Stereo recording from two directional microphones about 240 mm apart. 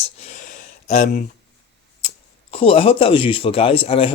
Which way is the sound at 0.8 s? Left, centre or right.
Left.